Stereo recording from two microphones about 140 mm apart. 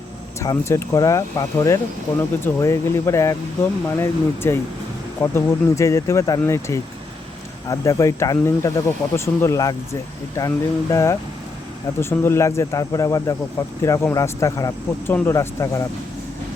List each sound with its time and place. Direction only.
0.3 s speech: 25° left (ahead or behind)